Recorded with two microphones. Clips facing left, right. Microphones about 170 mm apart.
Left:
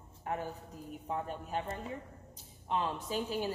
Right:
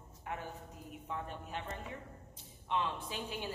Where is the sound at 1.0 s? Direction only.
35° left (ahead or behind).